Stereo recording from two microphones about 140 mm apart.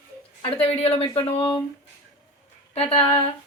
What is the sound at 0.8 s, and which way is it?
Speech, 45° left (ahead or behind).